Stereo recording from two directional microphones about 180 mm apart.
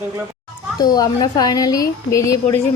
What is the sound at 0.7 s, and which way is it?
A woman's voice, 20° left (ahead or behind).